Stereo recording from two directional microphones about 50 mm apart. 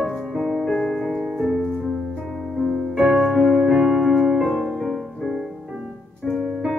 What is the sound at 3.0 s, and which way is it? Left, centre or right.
Music, centre.